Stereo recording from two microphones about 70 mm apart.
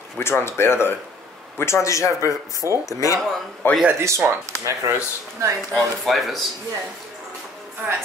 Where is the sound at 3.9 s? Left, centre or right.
Right.